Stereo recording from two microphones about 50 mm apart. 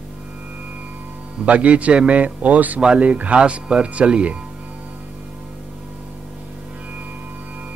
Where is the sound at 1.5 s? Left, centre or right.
Right.